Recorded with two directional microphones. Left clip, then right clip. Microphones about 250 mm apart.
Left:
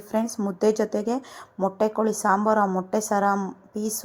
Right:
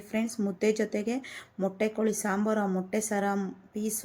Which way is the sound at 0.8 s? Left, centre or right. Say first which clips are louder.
Left 6 dB; left.